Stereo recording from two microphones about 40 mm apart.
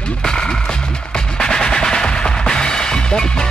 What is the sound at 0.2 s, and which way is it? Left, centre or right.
Music, centre.